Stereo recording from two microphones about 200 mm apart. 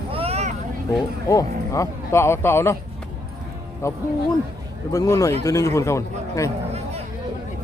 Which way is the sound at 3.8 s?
15° left (ahead or behind).